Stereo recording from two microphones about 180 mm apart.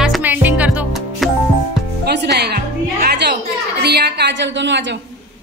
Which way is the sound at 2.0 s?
70° right (ahead or behind).